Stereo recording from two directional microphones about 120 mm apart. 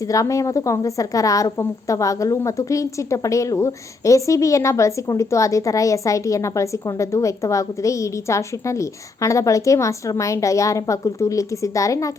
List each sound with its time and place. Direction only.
0.1 s a woman's voice: 25° left (ahead or behind)